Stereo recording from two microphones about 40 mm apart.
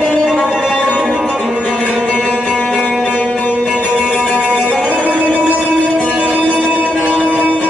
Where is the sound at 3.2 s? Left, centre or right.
Left.